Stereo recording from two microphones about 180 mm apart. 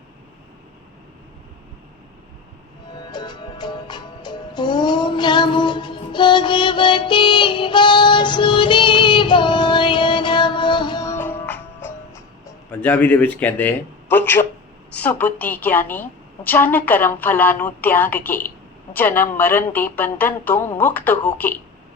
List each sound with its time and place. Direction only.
2.9 s music: 25° left (ahead or behind)
14.9 s a woman's voice: 10° left (ahead or behind)